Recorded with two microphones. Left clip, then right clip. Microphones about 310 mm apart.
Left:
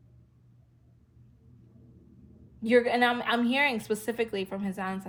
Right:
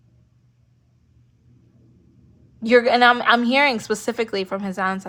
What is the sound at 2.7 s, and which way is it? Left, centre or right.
Speech, right.